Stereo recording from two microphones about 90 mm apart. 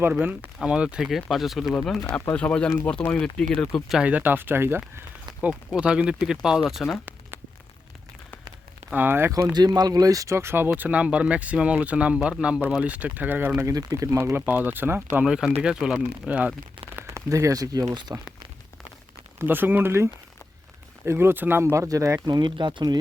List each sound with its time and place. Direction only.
0.6 s speech: 10° right (ahead or behind); by 3.8 s 10° left (ahead or behind)
4.0 s speech: 20° right (ahead or behind)
5.4 s speech: 15° right (ahead or behind)
6.8 s speech: 5° left (ahead or behind)
8.9 s speech: 20° right (ahead or behind)
9.6 s speech: 50° right (ahead or behind); by 10.7 s 25° right (ahead or behind)
10.8 s speech: 15° right (ahead or behind)
13.7 s speech: 40° right (ahead or behind); by 15.2 s 25° right (ahead or behind)
15.2 s speech: 5° right (ahead or behind)
17.2 s speech: 35° right (ahead or behind)
19.4 s speech: 25° right (ahead or behind)
22.3 s speech: 55° right (ahead or behind)